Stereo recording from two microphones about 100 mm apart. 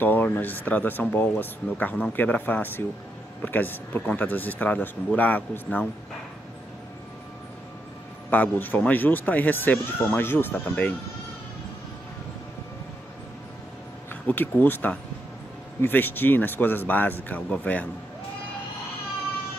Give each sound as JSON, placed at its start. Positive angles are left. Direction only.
{"t": 0.0, "sound": "speech", "side_deg": 20}
{"t": 8.3, "sound": "speech", "side_deg": 20}
{"t": 14.2, "sound": "speech", "side_deg": 20}